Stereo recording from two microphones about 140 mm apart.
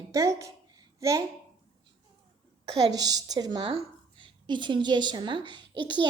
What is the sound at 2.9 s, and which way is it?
A woman's voice, 25° right (ahead or behind).